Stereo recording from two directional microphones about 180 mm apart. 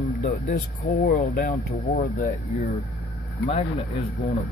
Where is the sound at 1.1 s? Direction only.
45° left (ahead or behind).